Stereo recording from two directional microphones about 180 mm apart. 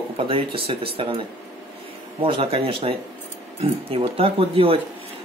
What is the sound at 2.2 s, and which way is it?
Speech, 30° right (ahead or behind).